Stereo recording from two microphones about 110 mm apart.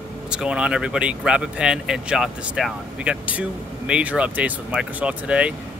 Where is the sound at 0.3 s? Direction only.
10° right (ahead or behind).